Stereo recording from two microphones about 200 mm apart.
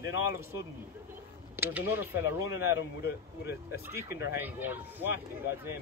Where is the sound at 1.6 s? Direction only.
10° right (ahead or behind).